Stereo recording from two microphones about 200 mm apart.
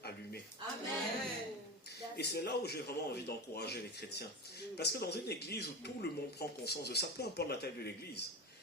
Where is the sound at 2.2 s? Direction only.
55° left (ahead or behind).